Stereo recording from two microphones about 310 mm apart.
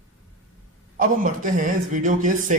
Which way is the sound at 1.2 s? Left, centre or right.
Right.